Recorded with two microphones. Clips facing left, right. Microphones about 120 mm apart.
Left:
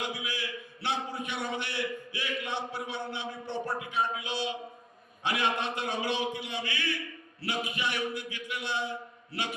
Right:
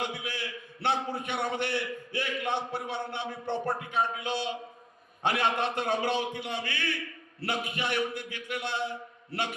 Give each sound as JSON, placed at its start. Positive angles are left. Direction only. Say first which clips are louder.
{"t": 0.1, "sound": "a man's voice", "louder": "even", "side_deg": -55}